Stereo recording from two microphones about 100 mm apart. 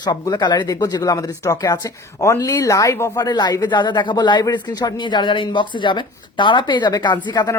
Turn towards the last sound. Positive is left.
turn(degrees=45)  # may be behind; listen again after turning